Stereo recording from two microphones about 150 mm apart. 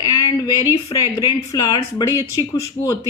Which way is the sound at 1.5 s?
25° left (ahead or behind).